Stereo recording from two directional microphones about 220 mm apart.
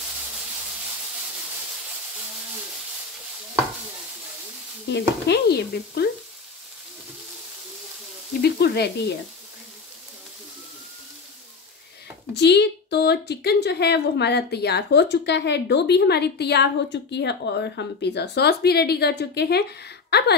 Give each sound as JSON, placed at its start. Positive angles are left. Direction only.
{"t": 4.8, "sound": "a woman's voice", "side_deg": 50}
{"t": 8.4, "sound": "a woman's voice", "side_deg": 45}
{"t": 12.4, "sound": "a woman's voice", "side_deg": 50}